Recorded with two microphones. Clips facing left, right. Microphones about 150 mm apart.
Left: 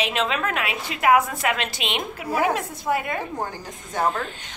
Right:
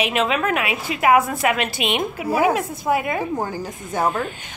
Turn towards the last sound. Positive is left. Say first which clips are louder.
# right 3 dB
turn(degrees=-10)  # may be behind; listen again after turning